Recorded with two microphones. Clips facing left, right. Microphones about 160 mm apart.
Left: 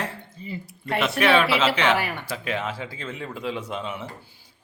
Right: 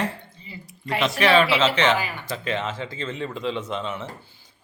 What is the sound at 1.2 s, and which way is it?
Speech, 5° left (ahead or behind).